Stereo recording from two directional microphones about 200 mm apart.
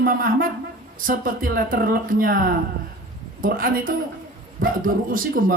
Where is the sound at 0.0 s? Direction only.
45° right (ahead or behind).